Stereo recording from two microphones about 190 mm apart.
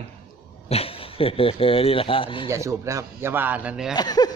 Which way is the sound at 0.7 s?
30° left (ahead or behind).